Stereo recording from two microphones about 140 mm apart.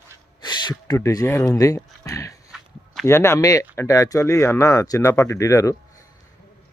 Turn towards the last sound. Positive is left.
turn(degrees=20)  # may be behind; listen again after turning